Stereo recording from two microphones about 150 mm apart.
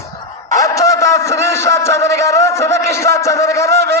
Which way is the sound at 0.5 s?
20° left (ahead or behind).